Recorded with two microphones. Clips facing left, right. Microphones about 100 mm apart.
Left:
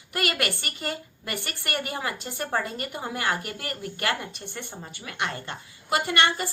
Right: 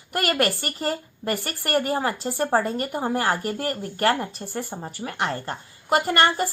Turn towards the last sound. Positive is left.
turn(degrees=-40)  # may be behind; listen again after turning